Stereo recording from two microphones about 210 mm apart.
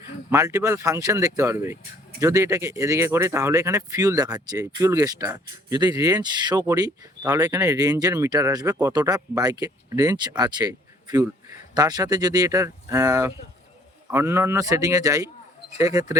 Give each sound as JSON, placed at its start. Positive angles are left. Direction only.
{"t": 0.3, "sound": "speech", "side_deg": -15}